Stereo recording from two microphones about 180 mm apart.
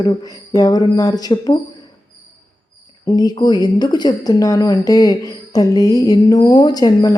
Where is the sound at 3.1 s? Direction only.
25° left (ahead or behind).